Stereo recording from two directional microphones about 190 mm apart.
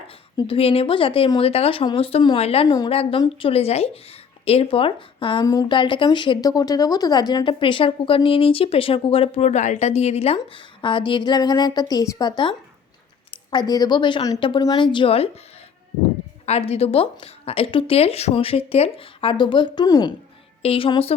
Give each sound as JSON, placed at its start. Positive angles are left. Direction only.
{"t": 0.3, "sound": "speech", "side_deg": 30}
{"t": 2.6, "sound": "speech", "side_deg": 20}
{"t": 13.3, "sound": "speech", "side_deg": 25}
{"t": 16.5, "sound": "a woman's voice", "side_deg": 30}